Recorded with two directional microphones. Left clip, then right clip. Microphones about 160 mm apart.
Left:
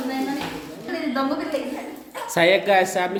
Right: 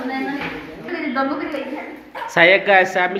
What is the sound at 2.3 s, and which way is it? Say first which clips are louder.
Speech: right 5 dB; 15° left (ahead or behind).